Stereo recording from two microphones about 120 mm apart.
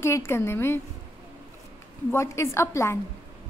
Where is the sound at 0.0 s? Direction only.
20° left (ahead or behind).